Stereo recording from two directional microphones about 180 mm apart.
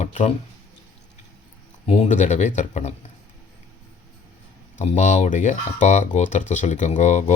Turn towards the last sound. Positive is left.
turn(degrees=40)  # may be behind; listen again after turning